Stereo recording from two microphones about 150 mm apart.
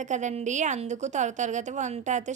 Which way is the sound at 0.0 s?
55° right (ahead or behind).